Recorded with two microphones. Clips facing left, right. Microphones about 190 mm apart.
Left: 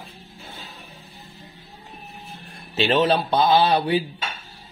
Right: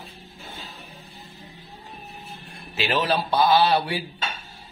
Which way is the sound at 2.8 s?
25° left (ahead or behind).